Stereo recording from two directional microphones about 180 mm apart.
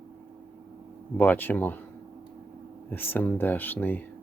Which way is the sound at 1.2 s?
10° left (ahead or behind).